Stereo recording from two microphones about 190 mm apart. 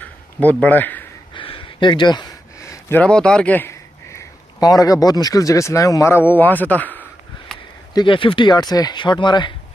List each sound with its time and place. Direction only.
0.4 s speech: 10° left (ahead or behind)
1.3 s a sound: 25° left (ahead or behind)
5.0 s speech: 20° left (ahead or behind)
7.9 s speech: 25° left (ahead or behind)